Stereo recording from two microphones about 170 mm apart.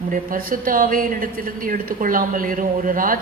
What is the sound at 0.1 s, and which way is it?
A woman's voice, 55° right (ahead or behind).